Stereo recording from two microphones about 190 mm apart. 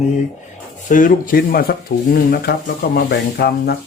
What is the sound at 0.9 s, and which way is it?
Speech, 45° left (ahead or behind).